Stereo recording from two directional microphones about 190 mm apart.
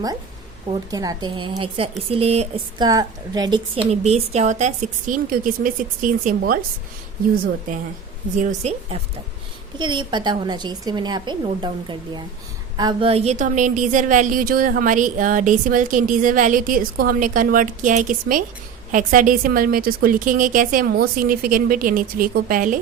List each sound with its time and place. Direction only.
0.9 s a woman's voice: 20° right (ahead or behind)
2.7 s a woman's voice: 20° right (ahead or behind); by 6.6 s 50° right (ahead or behind)
8.4 s a woman's voice: 35° right (ahead or behind)
9.7 s a woman's voice: 25° right (ahead or behind); by 22.8 s 45° right (ahead or behind)